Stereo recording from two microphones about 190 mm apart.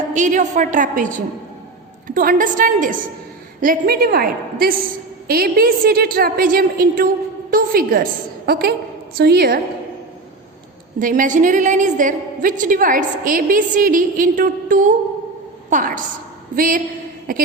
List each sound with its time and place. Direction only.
0.1 s a woman's voice: 40° right (ahead or behind); by 9.6 s 55° right (ahead or behind)
11.0 s a woman's voice: 45° right (ahead or behind)